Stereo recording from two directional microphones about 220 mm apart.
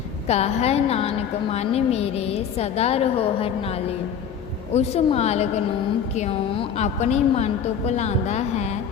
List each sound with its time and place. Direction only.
0.3 s a woman's voice: 30° left (ahead or behind)